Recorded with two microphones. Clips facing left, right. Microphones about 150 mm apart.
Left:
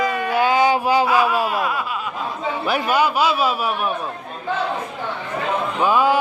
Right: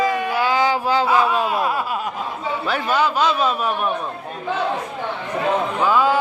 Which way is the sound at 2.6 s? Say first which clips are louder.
Left 1 dB; 10° left (ahead or behind).